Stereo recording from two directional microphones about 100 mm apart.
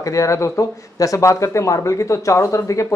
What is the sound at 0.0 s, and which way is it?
Speech, 35° left (ahead or behind).